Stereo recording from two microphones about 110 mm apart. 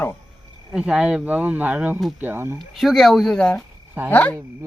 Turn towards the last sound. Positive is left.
turn(degrees=15)  # may be behind; listen again after turning